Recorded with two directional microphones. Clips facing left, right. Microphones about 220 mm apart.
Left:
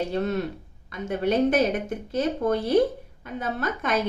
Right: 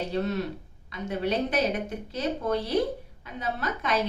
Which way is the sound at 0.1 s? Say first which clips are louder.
Left 2 dB; 50° left (ahead or behind).